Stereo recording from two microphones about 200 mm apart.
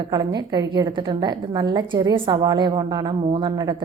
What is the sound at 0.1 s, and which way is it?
A woman's voice, 20° right (ahead or behind).